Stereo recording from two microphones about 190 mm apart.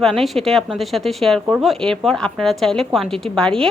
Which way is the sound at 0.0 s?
Centre (ahead or behind).